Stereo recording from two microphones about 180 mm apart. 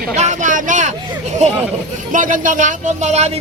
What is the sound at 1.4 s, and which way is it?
Speech, 40° right (ahead or behind).